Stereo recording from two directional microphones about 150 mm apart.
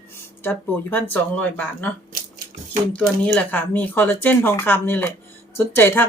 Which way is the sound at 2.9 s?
10° left (ahead or behind).